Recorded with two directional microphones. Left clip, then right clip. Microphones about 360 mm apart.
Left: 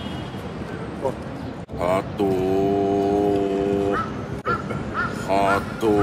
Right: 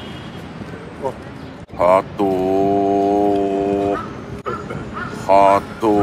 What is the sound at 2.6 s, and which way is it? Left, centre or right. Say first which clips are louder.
Vehicle: right 6 dB; right.